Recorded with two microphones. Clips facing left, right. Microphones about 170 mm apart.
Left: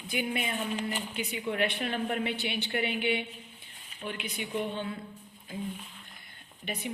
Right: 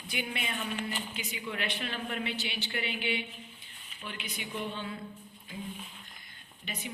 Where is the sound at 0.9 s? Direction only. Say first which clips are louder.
Left 4 dB; 55° left (ahead or behind).